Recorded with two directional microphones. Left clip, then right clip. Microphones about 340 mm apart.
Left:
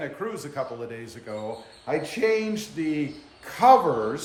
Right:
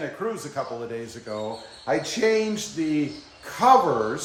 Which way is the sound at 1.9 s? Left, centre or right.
Centre.